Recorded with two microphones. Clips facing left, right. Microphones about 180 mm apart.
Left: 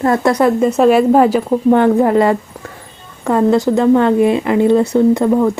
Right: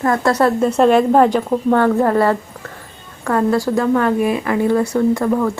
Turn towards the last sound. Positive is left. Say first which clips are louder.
# left 4 dB
turn(degrees=20)  # may be behind; listen again after turning